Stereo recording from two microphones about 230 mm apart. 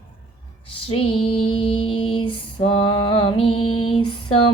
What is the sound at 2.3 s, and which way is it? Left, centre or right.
Female singing, left.